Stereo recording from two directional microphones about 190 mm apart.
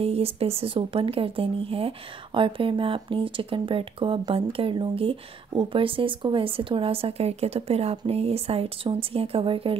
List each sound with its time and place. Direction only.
0.0 s speech: 30° right (ahead or behind)